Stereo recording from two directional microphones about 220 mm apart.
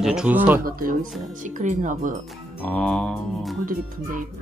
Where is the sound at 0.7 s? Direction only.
40° right (ahead or behind).